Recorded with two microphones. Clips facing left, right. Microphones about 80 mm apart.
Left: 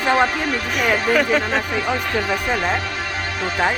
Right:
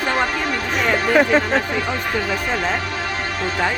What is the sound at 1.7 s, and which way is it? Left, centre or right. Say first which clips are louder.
Speech: left 1 dB; centre.